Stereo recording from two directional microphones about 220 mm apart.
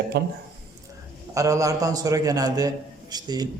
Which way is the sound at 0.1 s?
45° right (ahead or behind).